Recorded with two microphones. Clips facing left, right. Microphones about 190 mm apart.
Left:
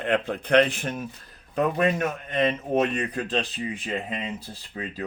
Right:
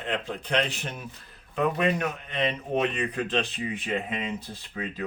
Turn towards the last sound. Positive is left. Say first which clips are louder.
# even
turn(degrees=35)  # may be behind; listen again after turning